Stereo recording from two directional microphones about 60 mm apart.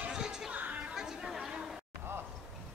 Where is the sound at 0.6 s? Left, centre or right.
Right.